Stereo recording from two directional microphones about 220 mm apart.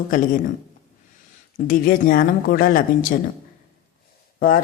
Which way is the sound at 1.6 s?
40° left (ahead or behind).